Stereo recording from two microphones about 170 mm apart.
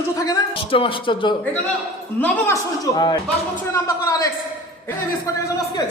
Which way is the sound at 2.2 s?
20° left (ahead or behind).